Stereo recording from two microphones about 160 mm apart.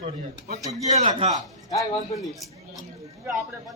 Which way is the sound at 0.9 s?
45° right (ahead or behind).